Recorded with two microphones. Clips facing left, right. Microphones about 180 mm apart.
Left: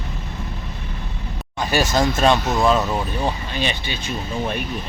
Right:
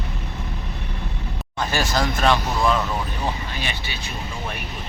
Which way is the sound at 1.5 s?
20° left (ahead or behind).